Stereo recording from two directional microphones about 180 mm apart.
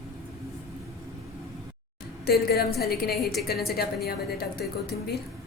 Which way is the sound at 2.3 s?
60° left (ahead or behind).